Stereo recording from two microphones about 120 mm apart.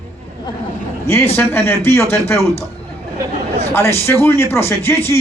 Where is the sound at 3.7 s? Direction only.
20° left (ahead or behind).